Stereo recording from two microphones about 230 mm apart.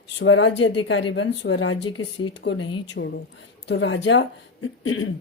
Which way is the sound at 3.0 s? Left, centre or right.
Left.